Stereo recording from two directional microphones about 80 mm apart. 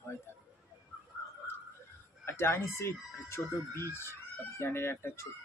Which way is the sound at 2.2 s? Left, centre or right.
Left.